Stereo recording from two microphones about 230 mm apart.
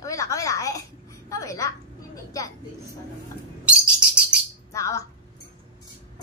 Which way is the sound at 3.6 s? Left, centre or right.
Centre.